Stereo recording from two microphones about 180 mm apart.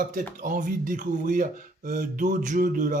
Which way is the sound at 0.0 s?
45° right (ahead or behind).